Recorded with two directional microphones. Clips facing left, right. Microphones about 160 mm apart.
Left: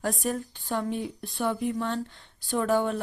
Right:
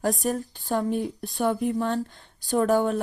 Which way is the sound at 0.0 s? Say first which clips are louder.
Right 4 dB; 40° right (ahead or behind).